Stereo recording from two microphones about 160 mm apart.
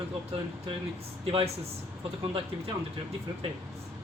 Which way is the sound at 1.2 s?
35° right (ahead or behind).